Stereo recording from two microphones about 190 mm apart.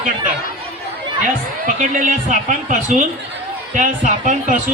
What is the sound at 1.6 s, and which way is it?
A man's voice, 40° right (ahead or behind).